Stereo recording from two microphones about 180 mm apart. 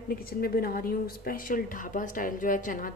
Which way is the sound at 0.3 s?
55° left (ahead or behind).